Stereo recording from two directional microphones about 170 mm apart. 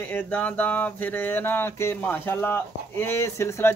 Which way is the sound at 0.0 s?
10° left (ahead or behind).